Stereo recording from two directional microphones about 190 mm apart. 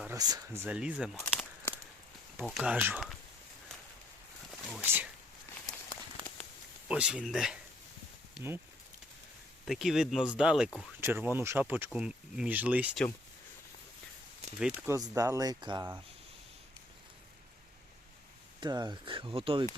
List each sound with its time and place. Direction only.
0.2 s speech: 20° right (ahead or behind)
1.1 s a sound: 5° left (ahead or behind)
2.4 s speech: centre (ahead or behind)
4.7 s speech: 10° right (ahead or behind)
6.8 s speech: 5° right (ahead or behind)
9.6 s speech: centre (ahead or behind)
14.6 s speech: 10° right (ahead or behind)
18.6 s speech: 20° right (ahead or behind)